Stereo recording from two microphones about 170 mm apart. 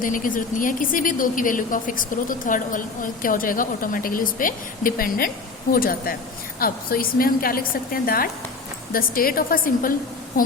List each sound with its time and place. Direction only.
0.0 s a woman's voice: 50° left (ahead or behind)